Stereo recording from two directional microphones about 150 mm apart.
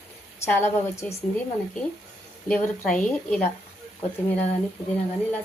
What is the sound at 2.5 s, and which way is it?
Speech, 10° left (ahead or behind).